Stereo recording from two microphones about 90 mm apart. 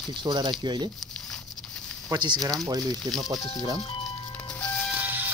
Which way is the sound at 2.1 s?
50° right (ahead or behind).